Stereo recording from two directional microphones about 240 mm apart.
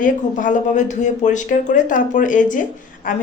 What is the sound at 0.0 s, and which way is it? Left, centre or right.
Speech, left.